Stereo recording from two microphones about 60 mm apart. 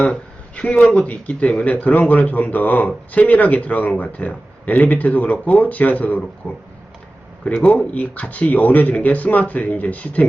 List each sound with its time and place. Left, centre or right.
0.0 s a sound: left
0.9 s speech: left
7.6 s speech: left